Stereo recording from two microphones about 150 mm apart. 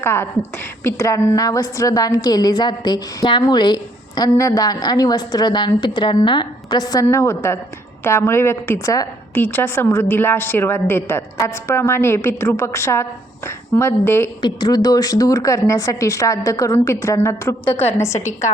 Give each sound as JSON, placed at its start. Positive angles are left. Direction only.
{"t": 0.0, "sound": "a woman's voice", "side_deg": 15}
{"t": 14.4, "sound": "a woman's voice", "side_deg": 30}